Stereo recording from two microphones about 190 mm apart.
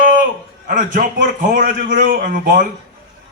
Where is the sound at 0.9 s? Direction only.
45° right (ahead or behind).